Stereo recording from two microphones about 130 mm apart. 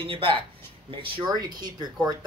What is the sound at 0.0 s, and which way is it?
Speech, 45° right (ahead or behind).